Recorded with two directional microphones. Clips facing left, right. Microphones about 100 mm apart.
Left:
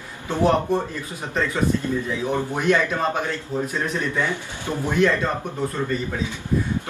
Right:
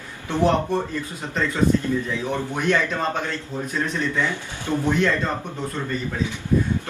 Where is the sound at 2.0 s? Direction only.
15° left (ahead or behind).